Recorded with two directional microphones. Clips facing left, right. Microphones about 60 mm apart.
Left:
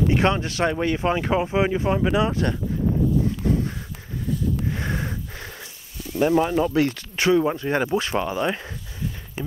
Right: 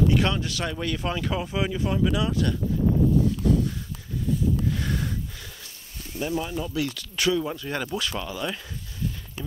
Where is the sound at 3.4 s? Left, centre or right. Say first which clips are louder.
Even; left.